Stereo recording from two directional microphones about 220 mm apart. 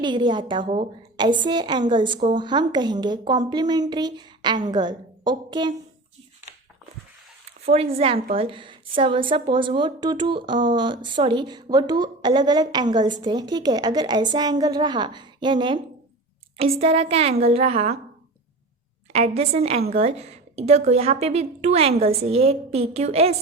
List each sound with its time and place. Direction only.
0.0 s a woman's voice: 20° right (ahead or behind)
7.7 s a woman's voice: 25° right (ahead or behind)
19.1 s a woman's voice: 30° right (ahead or behind)